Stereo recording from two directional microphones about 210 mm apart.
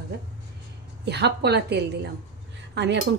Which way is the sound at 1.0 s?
50° right (ahead or behind).